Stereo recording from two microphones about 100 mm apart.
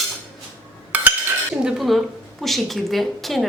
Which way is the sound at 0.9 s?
15° right (ahead or behind).